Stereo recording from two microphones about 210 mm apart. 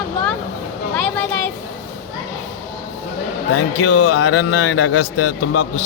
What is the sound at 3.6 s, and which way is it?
A man's voice, 80° left.